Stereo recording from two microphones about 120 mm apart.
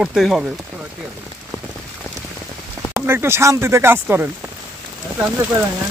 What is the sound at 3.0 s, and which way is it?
Speech, 20° right (ahead or behind).